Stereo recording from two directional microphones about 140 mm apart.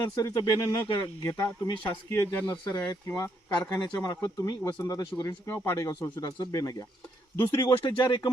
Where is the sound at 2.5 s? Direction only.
30° left (ahead or behind).